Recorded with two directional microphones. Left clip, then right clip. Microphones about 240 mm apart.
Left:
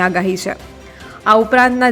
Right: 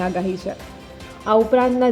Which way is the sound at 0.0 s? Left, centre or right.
Centre.